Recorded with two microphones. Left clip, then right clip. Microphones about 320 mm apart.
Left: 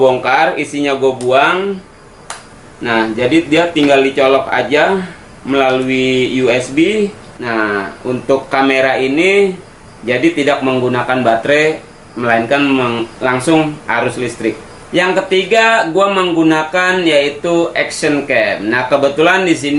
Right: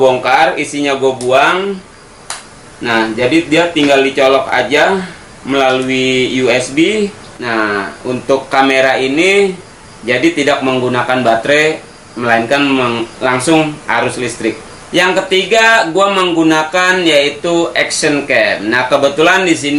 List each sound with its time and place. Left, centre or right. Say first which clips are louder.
0.1 s speech: right 2 dB; centre
2.8 s speech: right 1 dB; centre
11.2 s speech: even; centre
11.4 s speech: right 1 dB; centre